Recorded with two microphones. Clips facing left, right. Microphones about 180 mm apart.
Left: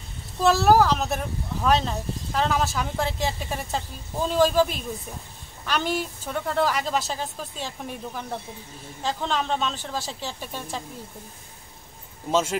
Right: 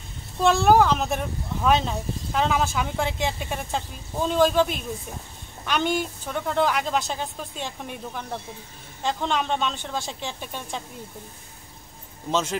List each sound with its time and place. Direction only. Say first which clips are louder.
0.4 s speech: even; 5° left (ahead or behind)
12.3 s a man's voice: left 2 dB; 10° left (ahead or behind)